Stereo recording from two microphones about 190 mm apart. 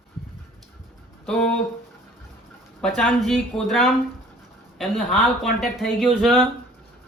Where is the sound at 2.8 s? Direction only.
Centre (ahead or behind).